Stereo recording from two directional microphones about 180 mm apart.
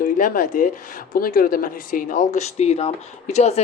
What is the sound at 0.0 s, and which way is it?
Speech, 50° left (ahead or behind).